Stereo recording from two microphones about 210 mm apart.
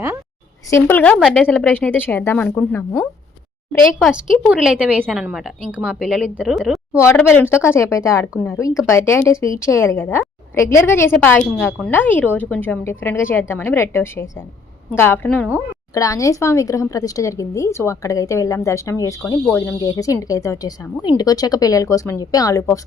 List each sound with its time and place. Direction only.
0.7 s speech: 10° left (ahead or behind)
4.4 s a woman's voice: 5° right (ahead or behind)
7.3 s speech: 10° left (ahead or behind)